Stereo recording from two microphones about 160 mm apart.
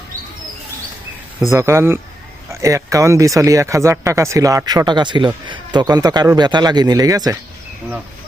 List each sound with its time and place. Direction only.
1.5 s speech: 20° right (ahead or behind)